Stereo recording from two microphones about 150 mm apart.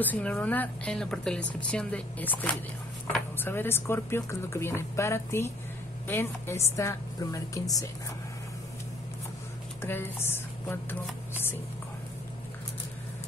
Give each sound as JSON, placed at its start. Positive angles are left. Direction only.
{"t": 0.0, "sound": "a woman's voice", "side_deg": 10}
{"t": 9.8, "sound": "speech", "side_deg": 15}